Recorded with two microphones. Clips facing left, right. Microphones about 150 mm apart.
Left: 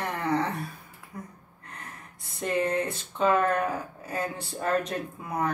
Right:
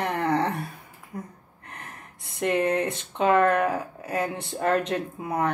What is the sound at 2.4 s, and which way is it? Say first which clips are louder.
Speech: right 3 dB; 65° right (ahead or behind).